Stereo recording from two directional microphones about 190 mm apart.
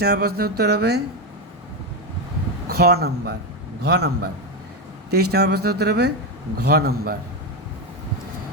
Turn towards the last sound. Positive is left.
turn(degrees=-55)  # may be behind; listen again after turning